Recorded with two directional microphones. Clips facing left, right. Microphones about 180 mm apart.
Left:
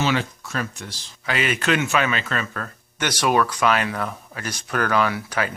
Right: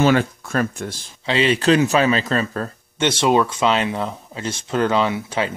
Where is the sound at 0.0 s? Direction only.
50° right (ahead or behind).